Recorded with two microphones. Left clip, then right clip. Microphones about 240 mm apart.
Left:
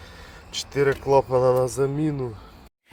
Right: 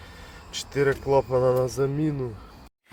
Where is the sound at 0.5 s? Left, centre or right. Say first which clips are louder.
Left 2 dB; centre.